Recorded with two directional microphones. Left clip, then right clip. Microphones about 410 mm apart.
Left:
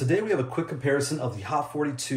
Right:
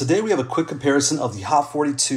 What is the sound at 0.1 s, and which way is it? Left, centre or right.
Speech, centre.